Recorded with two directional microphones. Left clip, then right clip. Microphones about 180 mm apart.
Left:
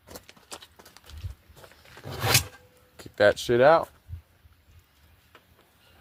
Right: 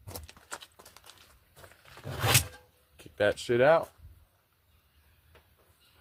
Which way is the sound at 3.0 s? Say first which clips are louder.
Left 7 dB; 40° left (ahead or behind).